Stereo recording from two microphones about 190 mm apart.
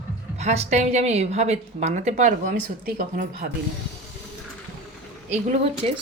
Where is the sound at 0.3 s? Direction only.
35° right (ahead or behind).